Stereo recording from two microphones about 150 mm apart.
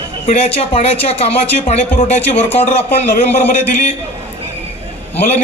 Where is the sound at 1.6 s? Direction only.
55° left (ahead or behind).